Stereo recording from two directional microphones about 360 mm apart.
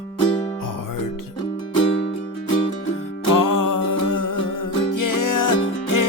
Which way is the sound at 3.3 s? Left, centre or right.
Left.